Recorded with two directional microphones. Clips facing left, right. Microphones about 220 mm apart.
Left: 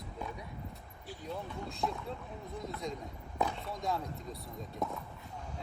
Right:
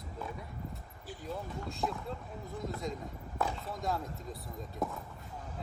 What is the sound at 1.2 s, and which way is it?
Speech, centre (ahead or behind).